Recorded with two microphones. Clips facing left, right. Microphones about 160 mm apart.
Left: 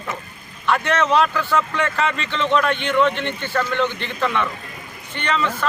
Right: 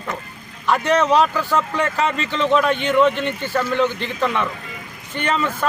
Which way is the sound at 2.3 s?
5° right (ahead or behind).